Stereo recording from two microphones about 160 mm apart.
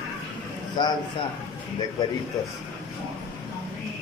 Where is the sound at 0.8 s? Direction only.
30° left (ahead or behind).